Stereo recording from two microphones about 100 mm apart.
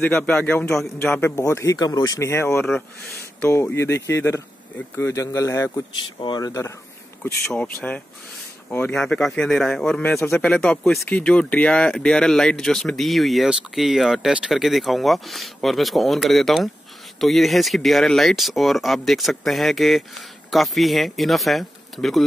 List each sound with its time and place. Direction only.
0.0 s speech: 10° left (ahead or behind)
1.4 s speech: 30° left (ahead or behind)
2.1 s speech: 25° left (ahead or behind)
5.1 s speech: 30° left (ahead or behind)
6.1 s speech: 55° left (ahead or behind)
6.4 s speech: 35° left (ahead or behind)
7.5 s speech: 15° left (ahead or behind)